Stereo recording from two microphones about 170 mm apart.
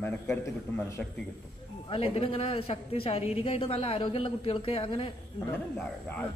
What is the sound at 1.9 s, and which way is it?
A man's voice, 35° left (ahead or behind).